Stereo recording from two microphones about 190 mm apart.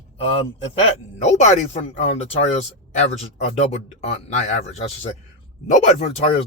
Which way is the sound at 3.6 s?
35° left (ahead or behind).